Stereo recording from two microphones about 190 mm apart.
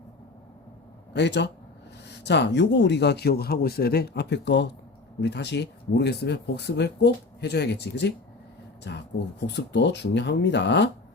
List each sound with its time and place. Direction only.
1.1 s speech: 65° left (ahead or behind)